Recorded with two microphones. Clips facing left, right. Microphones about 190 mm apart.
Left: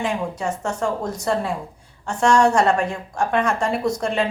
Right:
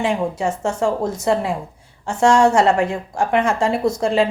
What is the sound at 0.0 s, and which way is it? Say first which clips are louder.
A woman's voice: right 4 dB; 25° right (ahead or behind).